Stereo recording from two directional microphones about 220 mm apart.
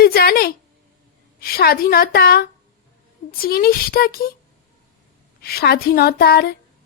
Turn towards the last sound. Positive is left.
turn(degrees=45)  # may be behind; listen again after turning